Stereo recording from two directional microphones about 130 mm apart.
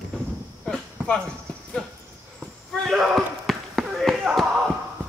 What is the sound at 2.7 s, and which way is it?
Basketball bounce, centre (ahead or behind).